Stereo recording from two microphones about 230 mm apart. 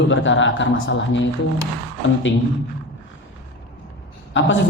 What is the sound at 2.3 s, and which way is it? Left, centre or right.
Speech, left.